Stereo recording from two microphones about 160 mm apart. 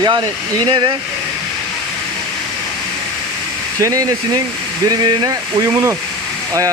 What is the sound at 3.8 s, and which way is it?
Speech, 20° right (ahead or behind).